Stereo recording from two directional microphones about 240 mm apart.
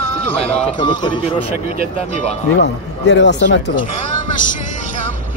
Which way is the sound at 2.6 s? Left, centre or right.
Left.